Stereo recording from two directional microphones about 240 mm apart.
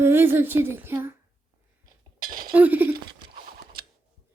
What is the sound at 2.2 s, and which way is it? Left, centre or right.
Cutlery, right.